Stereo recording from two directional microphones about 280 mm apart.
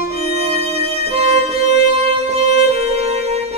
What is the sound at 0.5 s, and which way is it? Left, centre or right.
Music, right.